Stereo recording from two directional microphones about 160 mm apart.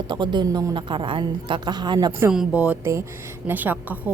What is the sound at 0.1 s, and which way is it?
A woman's voice, 30° right (ahead or behind).